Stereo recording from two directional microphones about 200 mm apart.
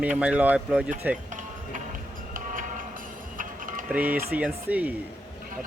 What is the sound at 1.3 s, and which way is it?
Music, 40° right (ahead or behind).